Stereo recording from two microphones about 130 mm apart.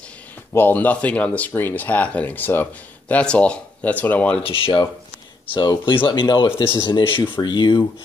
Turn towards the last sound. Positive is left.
turn(degrees=35)  # may be behind; listen again after turning